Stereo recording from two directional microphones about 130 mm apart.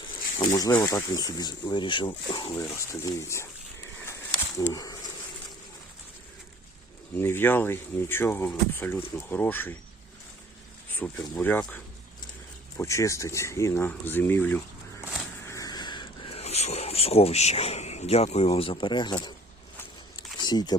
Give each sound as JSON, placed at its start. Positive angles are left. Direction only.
{"t": 0.3, "sound": "speech", "side_deg": 30}
{"t": 2.6, "sound": "speech", "side_deg": 25}
{"t": 4.0, "sound": "a sound", "side_deg": 20}
{"t": 7.2, "sound": "speech", "side_deg": 15}
{"t": 10.9, "sound": "speech", "side_deg": 10}
{"t": 15.4, "sound": "a sound", "side_deg": 25}
{"t": 16.4, "sound": "speech", "side_deg": 55}
{"t": 20.4, "sound": "speech", "side_deg": 35}